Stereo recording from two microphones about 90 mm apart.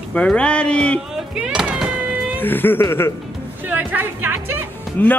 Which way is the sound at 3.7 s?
20° right (ahead or behind).